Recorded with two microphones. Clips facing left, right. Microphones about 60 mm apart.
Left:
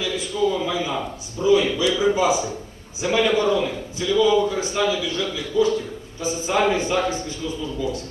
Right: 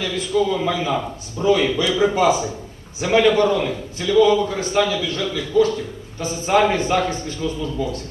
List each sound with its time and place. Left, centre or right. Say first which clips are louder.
0.0 s a man's voice: right 2 dB; right